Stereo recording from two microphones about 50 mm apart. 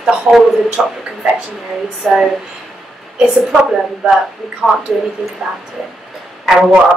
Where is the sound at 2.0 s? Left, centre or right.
Centre.